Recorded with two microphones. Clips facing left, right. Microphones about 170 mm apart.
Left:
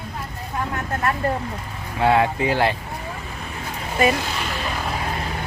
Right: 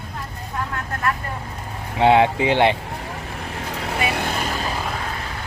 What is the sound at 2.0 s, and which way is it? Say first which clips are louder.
Speech: right 3 dB; 25° right (ahead or behind).